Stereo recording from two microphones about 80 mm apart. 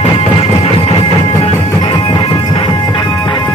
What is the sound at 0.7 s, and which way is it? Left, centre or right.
Music, left.